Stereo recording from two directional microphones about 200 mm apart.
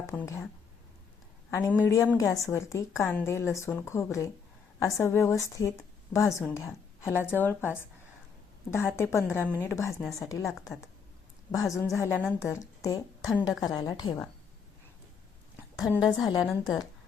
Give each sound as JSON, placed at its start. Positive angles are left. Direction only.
{"t": 0.1, "sound": "speech", "side_deg": 5}
{"t": 1.5, "sound": "a woman's voice", "side_deg": 10}
{"t": 11.7, "sound": "a woman's voice", "side_deg": 15}
{"t": 15.7, "sound": "a woman's voice", "side_deg": 15}